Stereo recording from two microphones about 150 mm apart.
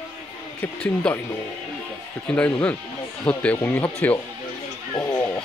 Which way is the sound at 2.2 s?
10° left (ahead or behind).